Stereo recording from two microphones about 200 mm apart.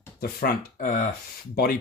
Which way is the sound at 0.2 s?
50° left (ahead or behind).